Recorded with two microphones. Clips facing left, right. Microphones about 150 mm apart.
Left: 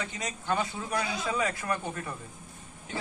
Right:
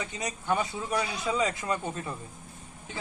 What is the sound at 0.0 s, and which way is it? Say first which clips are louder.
A man's voice: right 1 dB; 15° right (ahead or behind).